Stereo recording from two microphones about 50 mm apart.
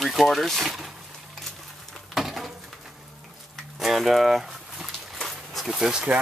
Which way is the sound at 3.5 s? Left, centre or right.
Centre.